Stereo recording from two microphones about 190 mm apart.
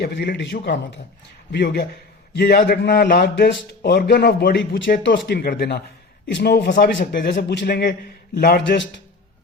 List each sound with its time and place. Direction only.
0.0 s a man's voice: 65° left (ahead or behind)